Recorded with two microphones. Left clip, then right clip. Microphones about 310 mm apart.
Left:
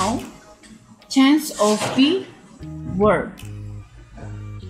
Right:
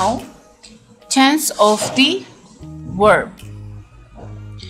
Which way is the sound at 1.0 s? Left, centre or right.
Right.